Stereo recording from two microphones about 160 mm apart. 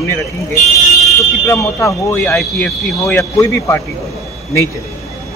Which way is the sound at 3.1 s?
20° left (ahead or behind).